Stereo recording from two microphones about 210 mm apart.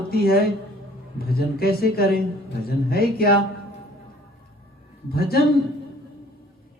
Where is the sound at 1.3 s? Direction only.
45° left (ahead or behind).